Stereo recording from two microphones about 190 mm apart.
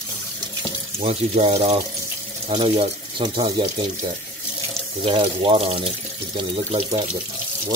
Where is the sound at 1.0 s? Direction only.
30° right (ahead or behind).